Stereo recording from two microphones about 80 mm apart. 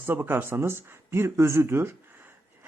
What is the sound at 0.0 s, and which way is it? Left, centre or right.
Speech, right.